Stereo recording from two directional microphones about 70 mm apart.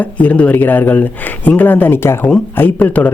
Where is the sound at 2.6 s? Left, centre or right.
Left.